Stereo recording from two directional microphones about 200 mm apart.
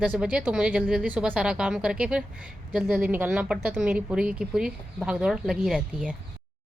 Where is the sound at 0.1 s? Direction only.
5° right (ahead or behind).